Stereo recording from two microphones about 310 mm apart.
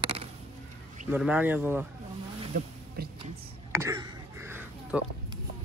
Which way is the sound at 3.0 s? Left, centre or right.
Right.